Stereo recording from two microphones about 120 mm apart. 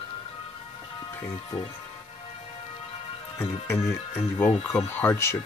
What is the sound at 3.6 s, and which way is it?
Speech, 25° left (ahead or behind).